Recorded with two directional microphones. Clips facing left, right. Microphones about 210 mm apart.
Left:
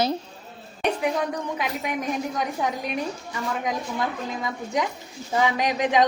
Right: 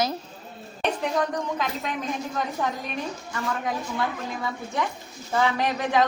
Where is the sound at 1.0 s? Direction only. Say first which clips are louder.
Even; 10° left (ahead or behind).